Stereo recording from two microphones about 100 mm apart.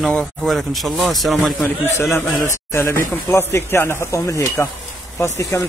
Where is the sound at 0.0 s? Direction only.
5° left (ahead or behind).